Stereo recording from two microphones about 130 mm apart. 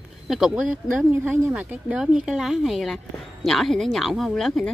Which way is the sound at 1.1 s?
20° right (ahead or behind).